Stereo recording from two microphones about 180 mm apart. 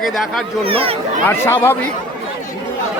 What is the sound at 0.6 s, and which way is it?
Speech, 30° right (ahead or behind).